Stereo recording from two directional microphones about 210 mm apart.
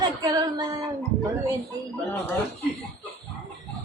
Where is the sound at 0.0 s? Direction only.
20° right (ahead or behind).